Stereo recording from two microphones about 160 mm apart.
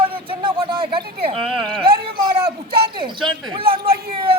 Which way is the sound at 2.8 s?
30° right (ahead or behind).